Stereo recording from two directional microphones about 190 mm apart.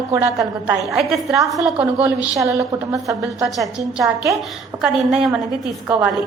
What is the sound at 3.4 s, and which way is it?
A woman's voice, centre (ahead or behind).